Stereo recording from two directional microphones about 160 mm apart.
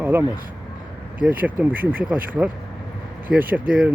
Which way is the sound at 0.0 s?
15° right (ahead or behind).